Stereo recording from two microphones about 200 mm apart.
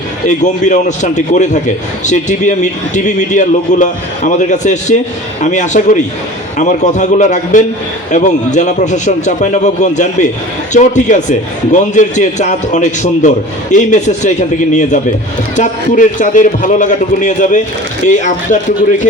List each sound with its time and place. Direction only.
0.3 s a man's voice: 40° left (ahead or behind)